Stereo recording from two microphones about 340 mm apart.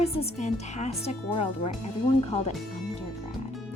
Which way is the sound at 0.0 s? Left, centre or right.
Centre.